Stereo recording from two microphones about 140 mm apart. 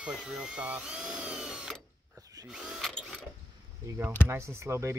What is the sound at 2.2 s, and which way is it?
Drill, 25° right (ahead or behind).